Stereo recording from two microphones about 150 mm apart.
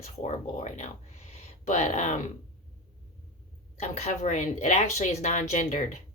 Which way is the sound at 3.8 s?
50° left (ahead or behind).